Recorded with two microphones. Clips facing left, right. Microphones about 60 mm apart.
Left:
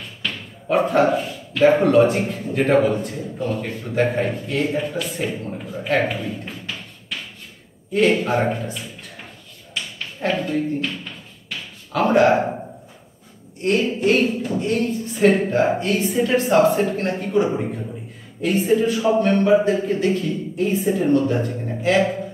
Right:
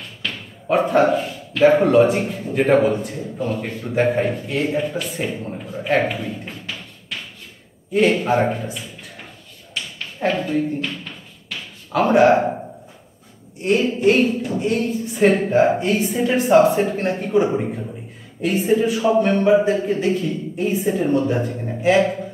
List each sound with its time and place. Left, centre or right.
0.2 s a sound: centre
1.5 s a man's voice: centre
7.9 s a man's voice: centre
10.2 s a man's voice: centre
11.9 s a man's voice: centre
13.6 s a woman's voice: centre
15.8 s a man's voice: centre
16.1 s a man's voice: centre
17.5 s a man's voice: centre